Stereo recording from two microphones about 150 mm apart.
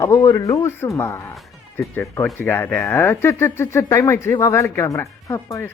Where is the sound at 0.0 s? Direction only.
20° left (ahead or behind).